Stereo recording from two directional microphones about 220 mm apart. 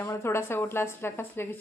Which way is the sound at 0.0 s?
10° left (ahead or behind).